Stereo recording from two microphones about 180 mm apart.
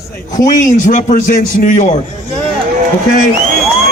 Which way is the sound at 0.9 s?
45° left (ahead or behind).